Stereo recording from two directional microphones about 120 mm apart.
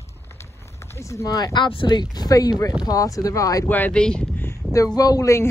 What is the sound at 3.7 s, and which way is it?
Speech, 15° left (ahead or behind).